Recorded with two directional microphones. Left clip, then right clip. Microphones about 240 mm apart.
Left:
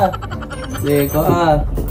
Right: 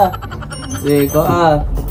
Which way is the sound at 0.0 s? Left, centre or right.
Centre.